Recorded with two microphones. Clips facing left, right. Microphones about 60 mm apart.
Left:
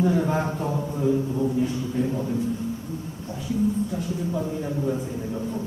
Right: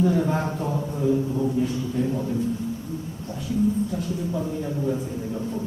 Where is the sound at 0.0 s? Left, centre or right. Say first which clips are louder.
Even; centre.